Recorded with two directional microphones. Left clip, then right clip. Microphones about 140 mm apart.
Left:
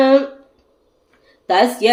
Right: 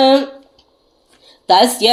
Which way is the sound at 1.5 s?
10° right (ahead or behind).